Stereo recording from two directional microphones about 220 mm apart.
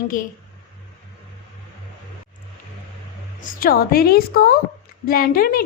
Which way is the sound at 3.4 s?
40° left (ahead or behind).